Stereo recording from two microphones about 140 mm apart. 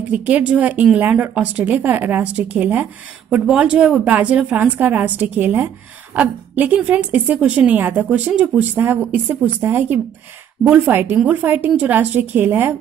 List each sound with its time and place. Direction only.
0.1 s speech: 10° right (ahead or behind)